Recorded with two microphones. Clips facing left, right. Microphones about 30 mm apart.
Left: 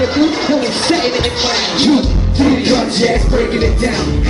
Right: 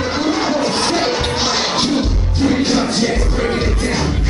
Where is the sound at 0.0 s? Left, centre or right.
Left.